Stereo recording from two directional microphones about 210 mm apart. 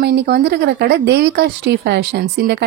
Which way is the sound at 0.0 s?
55° right (ahead or behind).